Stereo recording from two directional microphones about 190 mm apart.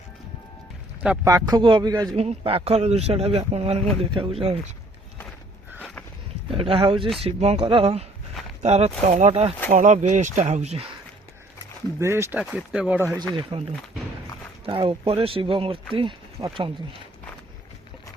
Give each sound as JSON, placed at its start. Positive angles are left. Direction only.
{"t": 1.0, "sound": "speech", "side_deg": -5}
{"t": 1.3, "sound": "speech", "side_deg": -20}
{"t": 2.1, "sound": "speech", "side_deg": -30}
{"t": 5.8, "sound": "sniff", "side_deg": 5}
{"t": 6.5, "sound": "speech", "side_deg": -30}
{"t": 11.9, "sound": "speech", "side_deg": -15}
{"t": 13.1, "sound": "speech", "side_deg": -25}